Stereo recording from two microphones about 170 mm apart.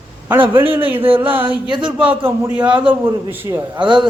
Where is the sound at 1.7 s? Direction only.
30° right (ahead or behind).